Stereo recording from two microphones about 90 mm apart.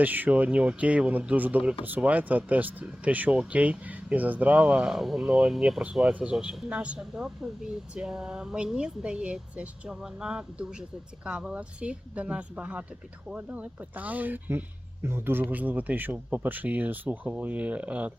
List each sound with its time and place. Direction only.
0.0 s speech: 20° right (ahead or behind)